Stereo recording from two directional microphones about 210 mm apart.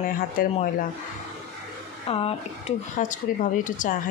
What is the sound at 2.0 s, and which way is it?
Speech, 25° left (ahead or behind).